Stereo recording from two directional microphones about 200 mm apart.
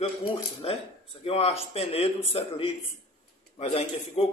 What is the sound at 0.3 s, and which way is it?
A man's voice, 25° left (ahead or behind).